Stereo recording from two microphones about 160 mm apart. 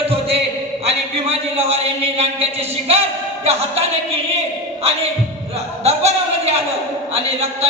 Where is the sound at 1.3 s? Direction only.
40° right (ahead or behind).